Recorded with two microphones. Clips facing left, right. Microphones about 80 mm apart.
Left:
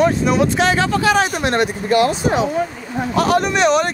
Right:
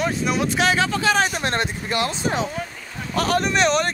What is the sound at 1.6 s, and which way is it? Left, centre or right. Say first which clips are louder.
Speech: left 8 dB; left.